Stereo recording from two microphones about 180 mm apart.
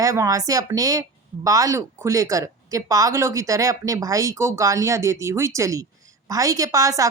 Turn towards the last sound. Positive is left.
turn(degrees=-20)  # may be behind; listen again after turning